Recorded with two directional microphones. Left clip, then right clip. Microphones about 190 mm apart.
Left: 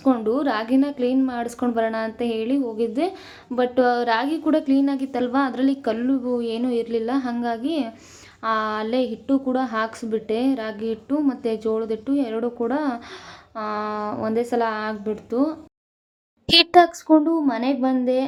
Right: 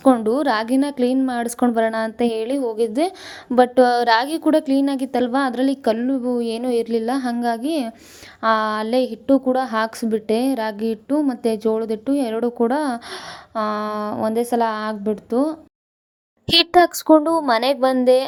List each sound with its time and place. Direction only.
0.0 s a woman's voice: 35° right (ahead or behind)
16.5 s a child's voice: centre (ahead or behind)
16.8 s a woman's voice: 50° right (ahead or behind)